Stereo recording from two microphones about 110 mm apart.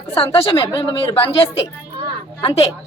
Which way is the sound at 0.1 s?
60° left (ahead or behind).